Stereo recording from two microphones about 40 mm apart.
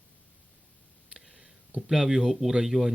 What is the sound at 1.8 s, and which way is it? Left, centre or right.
Speech, centre.